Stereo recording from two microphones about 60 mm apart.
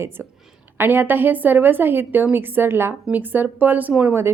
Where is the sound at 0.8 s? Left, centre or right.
Right.